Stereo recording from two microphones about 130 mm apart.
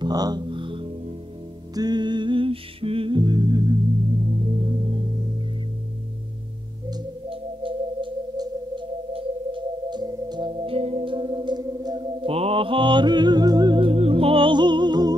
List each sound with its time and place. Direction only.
0.0 s music: 30° right (ahead or behind)
4.4 s music: 45° right (ahead or behind)
6.9 s music: 40° right (ahead or behind)